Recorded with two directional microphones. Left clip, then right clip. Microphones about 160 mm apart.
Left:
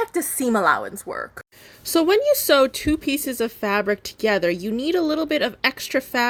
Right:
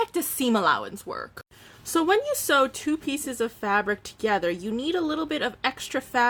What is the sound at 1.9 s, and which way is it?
Speech, 30° left (ahead or behind).